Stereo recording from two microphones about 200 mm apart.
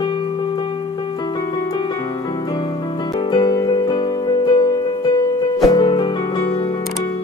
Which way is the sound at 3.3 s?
20° left (ahead or behind).